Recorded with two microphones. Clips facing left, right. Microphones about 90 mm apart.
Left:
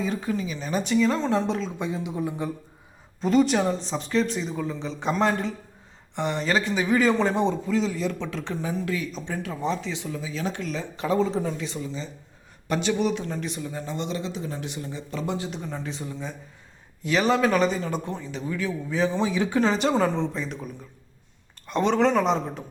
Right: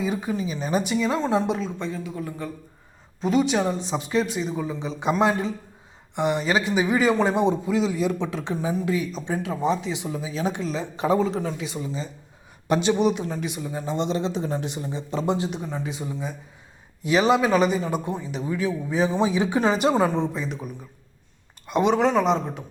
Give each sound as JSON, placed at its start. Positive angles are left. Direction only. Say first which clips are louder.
{"t": 0.0, "sound": "a man's voice", "louder": "right 1 dB", "side_deg": -15}
{"t": 1.8, "sound": "speech", "louder": "left 2 dB", "side_deg": 15}
{"t": 3.2, "sound": "a man's voice", "louder": "left 1 dB", "side_deg": 0}
{"t": 11.2, "sound": "a man's voice", "louder": "even", "side_deg": -5}
{"t": 13.2, "sound": "a man's voice", "louder": "right 2 dB", "side_deg": -5}
{"t": 13.9, "sound": "speech", "louder": "right 7 dB", "side_deg": -25}
{"t": 15.6, "sound": "a man's voice", "louder": "right 3 dB", "side_deg": -10}
{"t": 21.7, "sound": "speech", "louder": "right 1 dB", "side_deg": -10}